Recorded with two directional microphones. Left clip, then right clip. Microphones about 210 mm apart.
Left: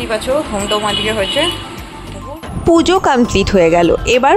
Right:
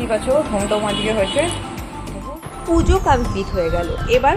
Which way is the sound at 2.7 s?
45° left (ahead or behind).